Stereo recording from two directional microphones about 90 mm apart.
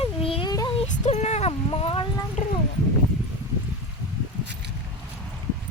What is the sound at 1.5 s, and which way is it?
Clip-clop, 90° left.